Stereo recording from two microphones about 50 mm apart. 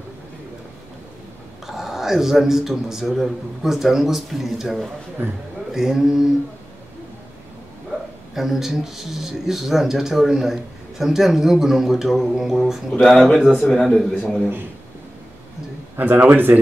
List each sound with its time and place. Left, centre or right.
1.7 s a man's voice: centre
8.4 s a man's voice: centre
16.0 s speech: right